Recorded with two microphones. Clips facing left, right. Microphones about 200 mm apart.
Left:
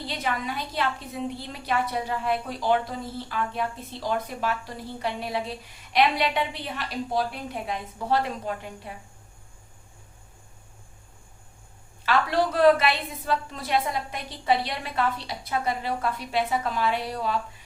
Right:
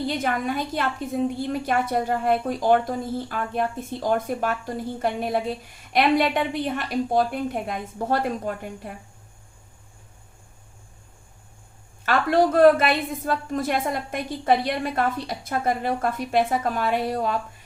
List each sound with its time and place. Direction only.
0.1 s a woman's voice: 50° right (ahead or behind)
12.0 s a woman's voice: 50° right (ahead or behind)